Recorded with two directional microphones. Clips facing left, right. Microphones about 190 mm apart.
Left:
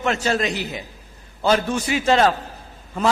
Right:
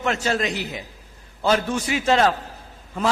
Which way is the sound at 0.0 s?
30° left (ahead or behind).